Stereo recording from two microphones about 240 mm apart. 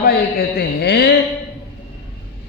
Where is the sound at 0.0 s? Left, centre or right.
Left.